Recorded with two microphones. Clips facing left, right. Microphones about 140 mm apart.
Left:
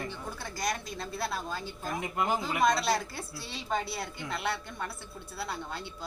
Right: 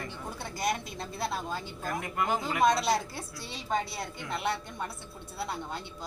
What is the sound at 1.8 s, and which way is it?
Speech, 15° left (ahead or behind).